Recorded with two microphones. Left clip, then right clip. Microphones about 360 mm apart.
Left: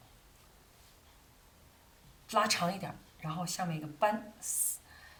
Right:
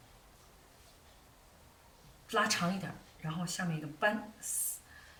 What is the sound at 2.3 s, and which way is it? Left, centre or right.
A woman's voice, centre.